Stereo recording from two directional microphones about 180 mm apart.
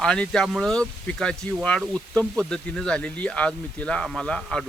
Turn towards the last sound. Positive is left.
turn(degrees=5)  # may be behind; listen again after turning